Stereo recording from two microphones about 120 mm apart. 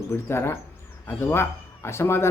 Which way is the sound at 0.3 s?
20° left (ahead or behind).